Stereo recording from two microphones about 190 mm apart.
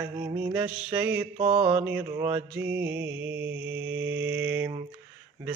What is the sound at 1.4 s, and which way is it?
Mantra, 30° right (ahead or behind).